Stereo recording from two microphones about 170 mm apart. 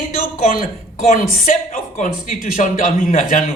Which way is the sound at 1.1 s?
50° left (ahead or behind).